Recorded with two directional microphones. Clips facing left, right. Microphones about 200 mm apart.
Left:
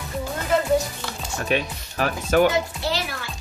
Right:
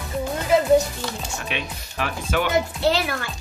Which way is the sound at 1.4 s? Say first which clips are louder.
Left 6 dB; 45° left (ahead or behind).